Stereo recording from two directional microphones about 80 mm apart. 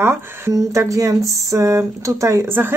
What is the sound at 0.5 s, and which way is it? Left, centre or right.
Speech, right.